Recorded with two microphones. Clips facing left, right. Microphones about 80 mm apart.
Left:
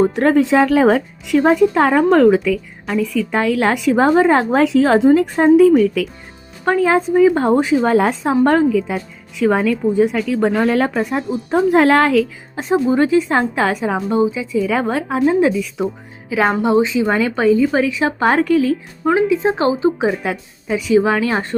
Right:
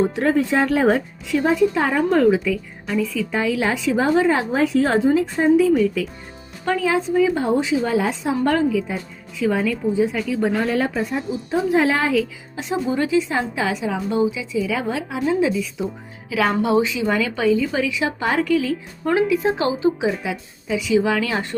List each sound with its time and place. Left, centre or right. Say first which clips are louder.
0.2 s speech: left 5 dB; left
1.3 s a woman's voice: left 5 dB; left
4.5 s speech: left 5 dB; left
5.1 s a woman's voice: left 5 dB; left
6.7 s a woman's voice: left 5 dB; left
9.4 s a woman's voice: left 5 dB; left
12.5 s a woman's voice: left 7 dB; left
14.2 s a woman's voice: left 3 dB; left
14.5 s a woman's voice: left 5 dB; left
16.3 s a woman's voice: left 3 dB; left
19.3 s a woman's voice: left 4 dB; left
20.2 s a woman's voice: left 4 dB; left